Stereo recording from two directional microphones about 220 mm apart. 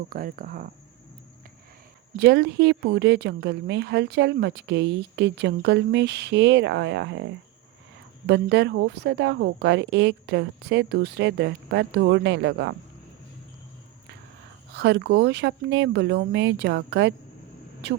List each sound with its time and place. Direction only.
0.1 s speech: 40° right (ahead or behind)
2.1 s speech: 50° right (ahead or behind)
8.3 s speech: 50° right (ahead or behind)
14.8 s speech: 50° right (ahead or behind)